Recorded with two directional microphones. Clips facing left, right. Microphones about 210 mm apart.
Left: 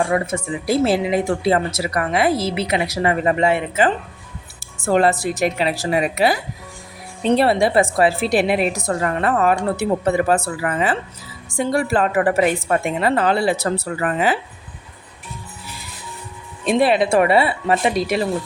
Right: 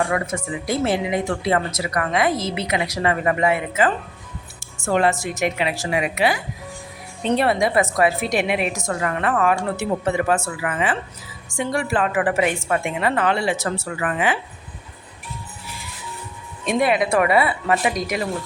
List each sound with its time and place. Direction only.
0.1 s a woman's voice: 25° left (ahead or behind)
16.6 s speech: 30° left (ahead or behind)